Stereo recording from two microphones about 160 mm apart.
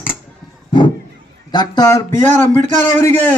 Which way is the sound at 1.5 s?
25° left (ahead or behind).